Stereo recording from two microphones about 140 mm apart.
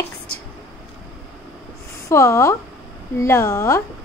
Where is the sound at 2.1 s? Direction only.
20° left (ahead or behind).